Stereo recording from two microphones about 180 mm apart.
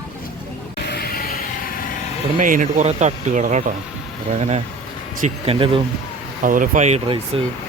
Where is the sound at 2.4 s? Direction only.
45° right (ahead or behind); by 5.8 s 30° right (ahead or behind).